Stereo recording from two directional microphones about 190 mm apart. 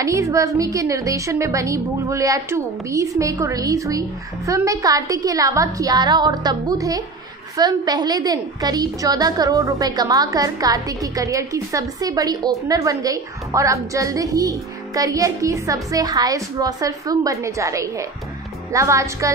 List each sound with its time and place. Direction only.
0.0 s a woman's voice: 15° right (ahead or behind)